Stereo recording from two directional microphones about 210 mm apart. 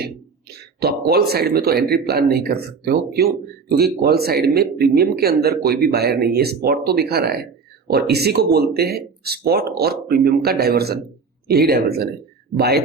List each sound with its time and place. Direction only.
0.8 s speech: 50° right (ahead or behind)